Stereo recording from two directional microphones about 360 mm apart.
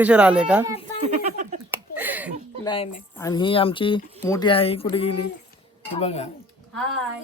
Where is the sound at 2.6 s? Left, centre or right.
Centre.